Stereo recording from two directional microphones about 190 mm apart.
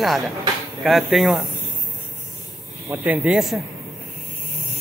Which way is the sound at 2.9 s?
5° right (ahead or behind).